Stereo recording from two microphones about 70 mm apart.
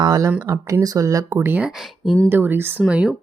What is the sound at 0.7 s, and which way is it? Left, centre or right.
Speech, right.